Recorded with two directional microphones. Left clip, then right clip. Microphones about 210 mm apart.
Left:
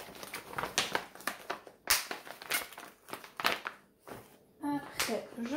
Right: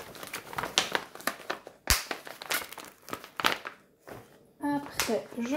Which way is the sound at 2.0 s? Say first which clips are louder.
Right 4 dB; 30° right (ahead or behind).